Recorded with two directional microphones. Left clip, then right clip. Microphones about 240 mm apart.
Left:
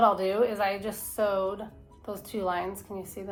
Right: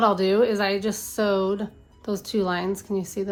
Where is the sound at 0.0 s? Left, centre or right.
Right.